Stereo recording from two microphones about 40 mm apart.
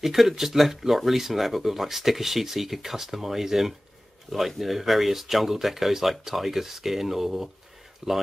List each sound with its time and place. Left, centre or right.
0.0 s speech: centre
8.0 s speech: centre